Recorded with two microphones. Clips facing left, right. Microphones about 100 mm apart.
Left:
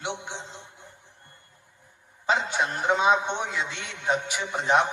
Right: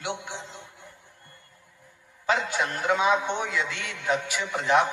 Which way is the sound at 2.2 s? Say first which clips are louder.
Left 1 dB; 20° left (ahead or behind).